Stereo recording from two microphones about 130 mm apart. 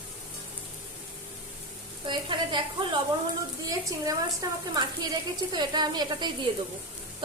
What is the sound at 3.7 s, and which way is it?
A woman's voice, 25° right (ahead or behind).